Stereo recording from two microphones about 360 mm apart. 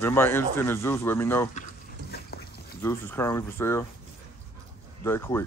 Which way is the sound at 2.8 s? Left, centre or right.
Centre.